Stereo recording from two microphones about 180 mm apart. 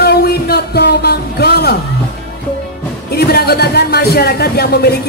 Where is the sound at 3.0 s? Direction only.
60° left (ahead or behind).